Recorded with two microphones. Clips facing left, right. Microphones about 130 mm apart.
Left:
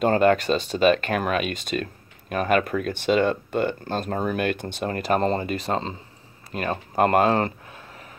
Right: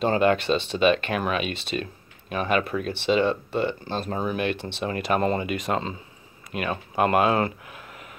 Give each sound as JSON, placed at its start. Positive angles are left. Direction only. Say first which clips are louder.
{"t": 0.0, "sound": "speech", "louder": "left 2 dB", "side_deg": 45}